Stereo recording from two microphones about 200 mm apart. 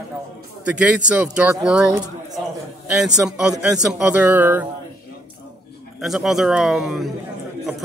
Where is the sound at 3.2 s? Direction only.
5° right (ahead or behind).